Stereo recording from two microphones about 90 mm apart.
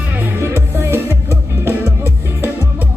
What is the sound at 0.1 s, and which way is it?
Music, 20° right (ahead or behind).